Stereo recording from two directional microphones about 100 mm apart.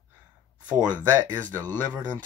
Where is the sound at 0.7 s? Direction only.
15° right (ahead or behind).